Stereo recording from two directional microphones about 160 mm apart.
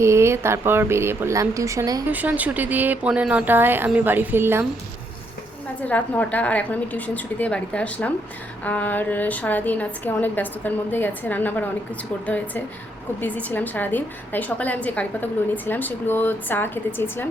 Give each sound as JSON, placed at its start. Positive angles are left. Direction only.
{"t": 0.0, "sound": "speech", "side_deg": -15}
{"t": 2.0, "sound": "speech", "side_deg": -10}
{"t": 5.8, "sound": "a woman's voice", "side_deg": 10}